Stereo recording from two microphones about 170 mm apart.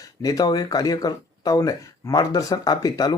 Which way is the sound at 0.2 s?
20° left (ahead or behind).